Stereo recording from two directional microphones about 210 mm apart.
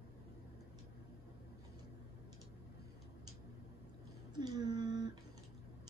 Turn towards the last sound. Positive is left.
turn(degrees=-20)  # may be behind; listen again after turning